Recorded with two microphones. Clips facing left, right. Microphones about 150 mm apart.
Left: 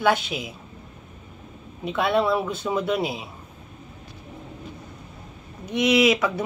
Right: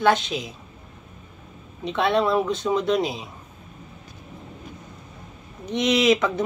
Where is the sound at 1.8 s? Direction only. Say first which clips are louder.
Right 1 dB; 5° left (ahead or behind).